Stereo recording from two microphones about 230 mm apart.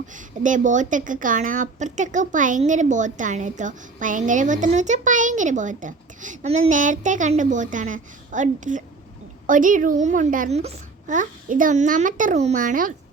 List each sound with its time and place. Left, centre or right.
0.1 s a woman's voice: right